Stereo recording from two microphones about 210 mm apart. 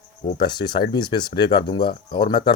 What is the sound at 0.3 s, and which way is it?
Speech, 20° left (ahead or behind).